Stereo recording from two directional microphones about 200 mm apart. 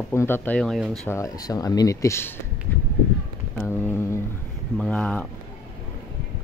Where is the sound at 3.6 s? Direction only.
10° left (ahead or behind).